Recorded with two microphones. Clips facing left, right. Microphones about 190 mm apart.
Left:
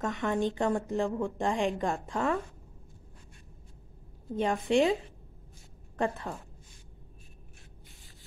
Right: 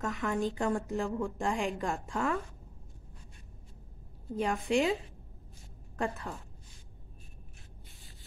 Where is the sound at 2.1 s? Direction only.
30° left (ahead or behind).